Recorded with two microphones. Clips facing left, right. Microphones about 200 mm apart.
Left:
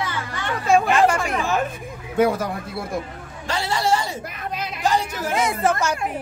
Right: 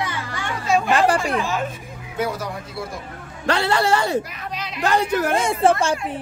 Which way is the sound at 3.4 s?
65° right (ahead or behind).